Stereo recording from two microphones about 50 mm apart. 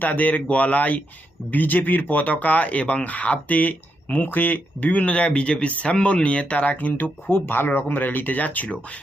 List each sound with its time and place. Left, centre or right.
0.0 s speech: left